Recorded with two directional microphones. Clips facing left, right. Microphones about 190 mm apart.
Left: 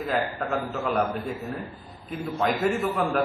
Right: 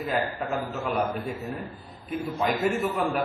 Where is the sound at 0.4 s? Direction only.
5° right (ahead or behind).